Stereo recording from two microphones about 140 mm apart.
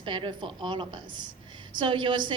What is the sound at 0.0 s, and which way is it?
A woman's voice, 35° right (ahead or behind).